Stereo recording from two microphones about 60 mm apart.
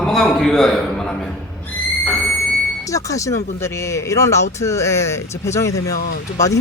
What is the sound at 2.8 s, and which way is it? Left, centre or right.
Speech, left.